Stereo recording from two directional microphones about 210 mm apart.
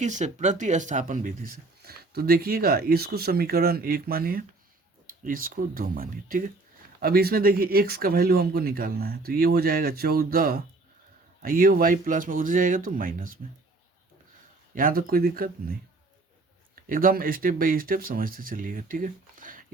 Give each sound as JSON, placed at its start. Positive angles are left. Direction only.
{"t": 0.0, "sound": "speech", "side_deg": -35}
{"t": 14.8, "sound": "speech", "side_deg": -40}
{"t": 16.9, "sound": "speech", "side_deg": -45}